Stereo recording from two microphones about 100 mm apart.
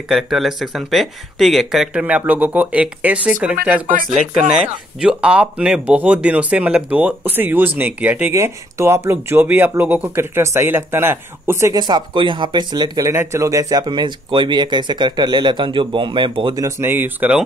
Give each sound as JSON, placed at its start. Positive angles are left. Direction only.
{"t": 0.1, "sound": "speech", "side_deg": 0}
{"t": 2.0, "sound": "speech", "side_deg": -15}
{"t": 8.3, "sound": "speech", "side_deg": -25}
{"t": 11.7, "sound": "speech", "side_deg": -45}
{"t": 13.0, "sound": "speech", "side_deg": -25}
{"t": 16.8, "sound": "speech", "side_deg": -20}